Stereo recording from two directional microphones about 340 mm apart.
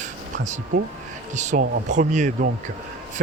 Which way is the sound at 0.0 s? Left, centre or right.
Right.